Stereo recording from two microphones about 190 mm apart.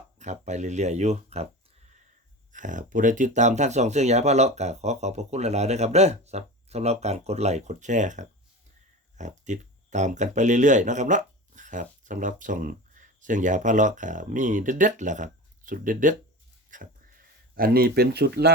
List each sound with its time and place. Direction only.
0.2 s speech: 40° right (ahead or behind)
2.5 s speech: 40° right (ahead or behind)
16.7 s a sound: 45° right (ahead or behind)
17.5 s speech: 50° right (ahead or behind)